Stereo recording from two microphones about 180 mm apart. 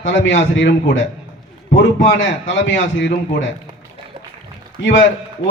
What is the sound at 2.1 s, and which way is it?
Speech, 85° left.